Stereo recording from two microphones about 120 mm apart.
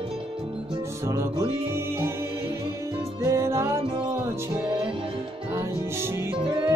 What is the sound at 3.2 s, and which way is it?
Music, 25° right (ahead or behind).